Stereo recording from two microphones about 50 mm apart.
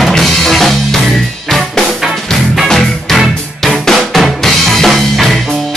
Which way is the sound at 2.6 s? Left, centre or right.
Centre.